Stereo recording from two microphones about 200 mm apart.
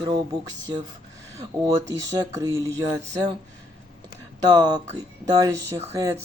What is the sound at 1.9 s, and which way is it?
Speech, 15° right (ahead or behind).